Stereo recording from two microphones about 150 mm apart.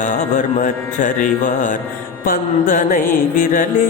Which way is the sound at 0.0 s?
60° left (ahead or behind).